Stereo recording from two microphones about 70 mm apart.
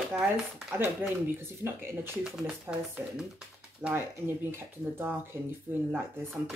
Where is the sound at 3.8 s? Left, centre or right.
Centre.